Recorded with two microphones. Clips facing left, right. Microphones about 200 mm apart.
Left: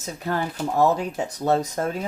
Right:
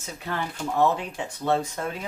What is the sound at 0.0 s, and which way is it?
Speech, 40° left (ahead or behind).